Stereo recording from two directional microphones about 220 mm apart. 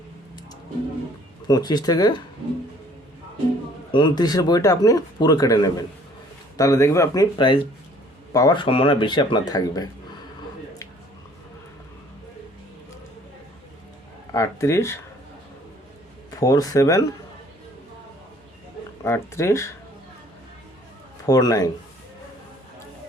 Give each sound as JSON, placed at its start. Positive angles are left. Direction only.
{"t": 1.5, "sound": "speech", "side_deg": 20}
{"t": 3.9, "sound": "speech", "side_deg": 20}
{"t": 14.3, "sound": "speech", "side_deg": 15}
{"t": 16.4, "sound": "speech", "side_deg": 15}
{"t": 19.0, "sound": "speech", "side_deg": 10}
{"t": 21.2, "sound": "speech", "side_deg": 15}